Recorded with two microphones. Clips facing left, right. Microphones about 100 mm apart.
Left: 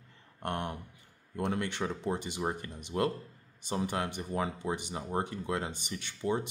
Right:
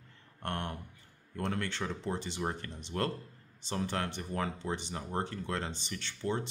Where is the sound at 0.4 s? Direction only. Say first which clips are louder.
Left 2 dB; 15° left (ahead or behind).